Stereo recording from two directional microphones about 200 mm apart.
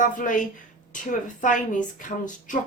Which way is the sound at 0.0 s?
40° left (ahead or behind).